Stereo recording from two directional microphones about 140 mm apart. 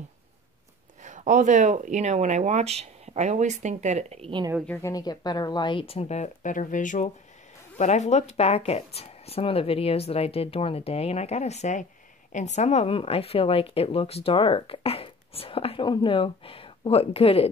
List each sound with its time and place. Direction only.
1.0 s speech: 60° right (ahead or behind)
4.6 s a woman's voice: 25° left (ahead or behind); by 17.5 s 45° left (ahead or behind)